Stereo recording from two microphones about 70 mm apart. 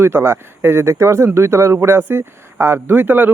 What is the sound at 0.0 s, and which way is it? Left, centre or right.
Speech, right.